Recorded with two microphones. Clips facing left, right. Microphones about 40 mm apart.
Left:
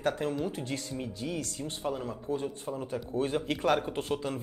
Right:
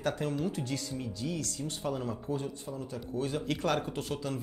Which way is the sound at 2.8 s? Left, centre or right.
Left.